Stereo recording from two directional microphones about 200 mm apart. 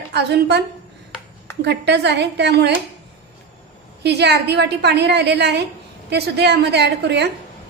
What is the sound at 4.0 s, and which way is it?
A woman's voice, 55° right (ahead or behind).